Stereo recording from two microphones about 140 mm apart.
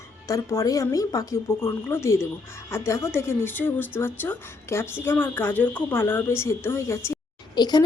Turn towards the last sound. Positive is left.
turn(degrees=30)  # may be behind; listen again after turning